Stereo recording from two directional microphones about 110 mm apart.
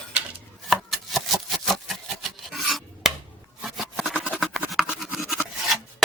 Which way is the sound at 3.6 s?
5° right (ahead or behind).